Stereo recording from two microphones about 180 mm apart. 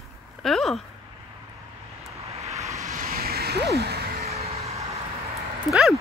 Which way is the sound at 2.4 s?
35° right (ahead or behind).